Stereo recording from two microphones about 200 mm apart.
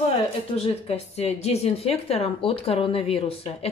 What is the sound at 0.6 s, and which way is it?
Speech, 30° left (ahead or behind).